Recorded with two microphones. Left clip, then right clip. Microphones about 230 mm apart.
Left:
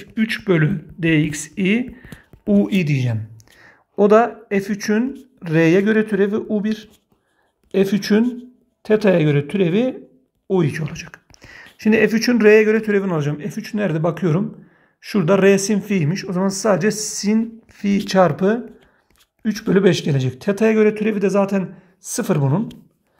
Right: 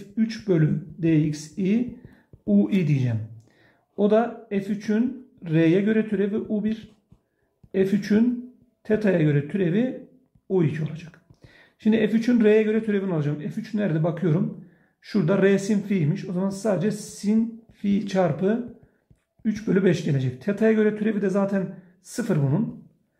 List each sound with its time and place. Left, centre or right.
0.0 s a man's voice: left